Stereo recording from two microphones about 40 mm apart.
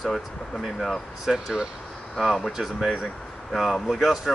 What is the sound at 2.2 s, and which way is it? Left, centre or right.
Speech, centre.